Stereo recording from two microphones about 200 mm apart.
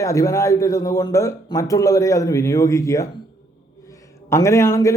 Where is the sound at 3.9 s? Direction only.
15° left (ahead or behind).